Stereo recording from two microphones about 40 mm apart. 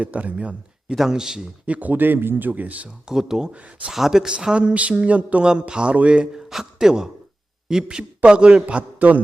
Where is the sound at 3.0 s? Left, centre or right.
Centre.